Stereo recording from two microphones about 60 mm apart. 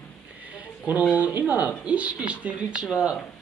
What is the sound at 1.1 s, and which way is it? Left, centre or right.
Speech, right.